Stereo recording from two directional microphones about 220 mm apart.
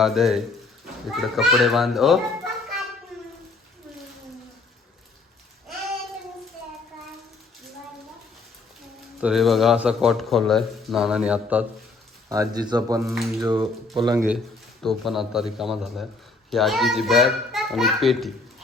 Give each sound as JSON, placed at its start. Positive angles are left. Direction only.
{"t": 0.0, "sound": "a man's voice", "side_deg": 0}
{"t": 9.2, "sound": "a man's voice", "side_deg": 0}
{"t": 12.3, "sound": "speech", "side_deg": -15}
{"t": 14.3, "sound": "a man's voice", "side_deg": 0}